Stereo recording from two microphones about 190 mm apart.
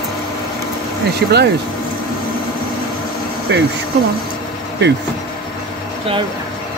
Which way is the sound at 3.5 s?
70° right (ahead or behind).